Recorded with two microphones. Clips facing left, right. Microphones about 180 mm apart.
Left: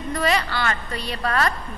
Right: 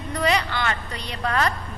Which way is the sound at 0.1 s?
15° right (ahead or behind).